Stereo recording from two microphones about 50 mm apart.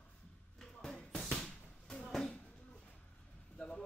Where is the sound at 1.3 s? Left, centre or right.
Centre.